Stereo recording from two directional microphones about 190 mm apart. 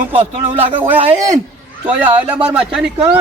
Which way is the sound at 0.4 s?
35° right (ahead or behind).